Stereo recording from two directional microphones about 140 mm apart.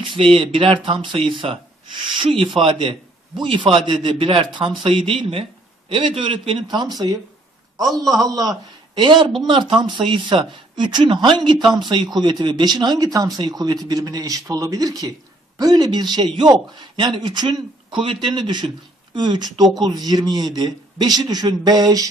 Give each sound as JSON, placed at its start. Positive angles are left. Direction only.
{"t": 0.1, "sound": "a man's voice", "side_deg": -40}